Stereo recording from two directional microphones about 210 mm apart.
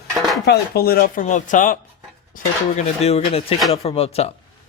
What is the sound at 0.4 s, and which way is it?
Speech, 50° left (ahead or behind).